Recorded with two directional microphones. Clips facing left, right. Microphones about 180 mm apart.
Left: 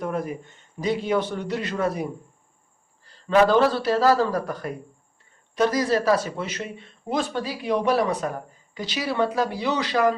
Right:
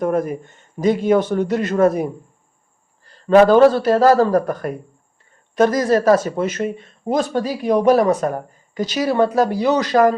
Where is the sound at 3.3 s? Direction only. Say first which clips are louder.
Right 8 dB; 50° right (ahead or behind).